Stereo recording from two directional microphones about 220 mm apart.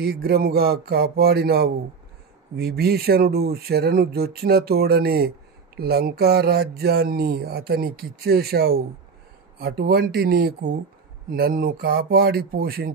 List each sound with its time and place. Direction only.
0.0 s speech: 45° right (ahead or behind)